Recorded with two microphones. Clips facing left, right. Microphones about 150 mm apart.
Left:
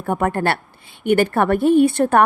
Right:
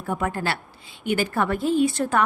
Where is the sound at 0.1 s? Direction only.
55° left (ahead or behind).